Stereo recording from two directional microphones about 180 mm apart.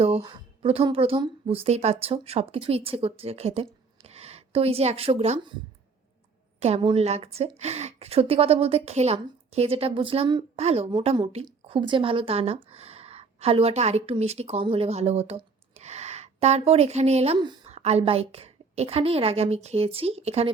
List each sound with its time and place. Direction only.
0.0 s a woman's voice: 30° right (ahead or behind)
6.6 s a woman's voice: 35° right (ahead or behind)
17.7 s a woman's voice: 35° right (ahead or behind)